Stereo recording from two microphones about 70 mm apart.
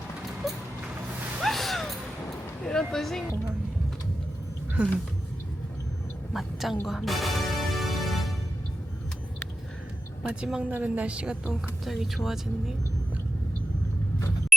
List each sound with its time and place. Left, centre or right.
0.4 s vehicle: centre
1.4 s a sound: centre
2.6 s speech: centre
6.3 s a sound: centre
6.8 s music: centre
10.2 s a woman's voice: centre
11.9 s speech: centre